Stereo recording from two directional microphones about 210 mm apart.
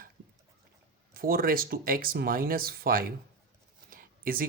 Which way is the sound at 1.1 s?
45° right (ahead or behind).